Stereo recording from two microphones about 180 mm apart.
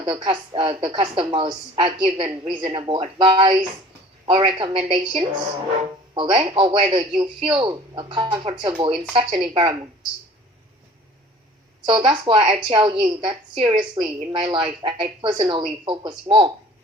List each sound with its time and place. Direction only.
0.0 s a woman's voice: 25° right (ahead or behind)
11.9 s a woman's voice: 25° right (ahead or behind)